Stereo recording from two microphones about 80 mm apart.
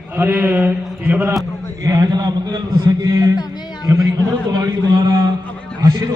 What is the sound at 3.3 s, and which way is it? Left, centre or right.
Speech, left.